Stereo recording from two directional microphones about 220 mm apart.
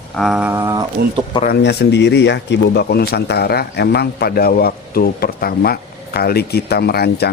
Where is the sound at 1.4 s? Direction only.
45° left (ahead or behind).